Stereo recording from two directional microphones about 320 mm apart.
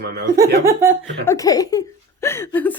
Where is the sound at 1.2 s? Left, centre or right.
Centre.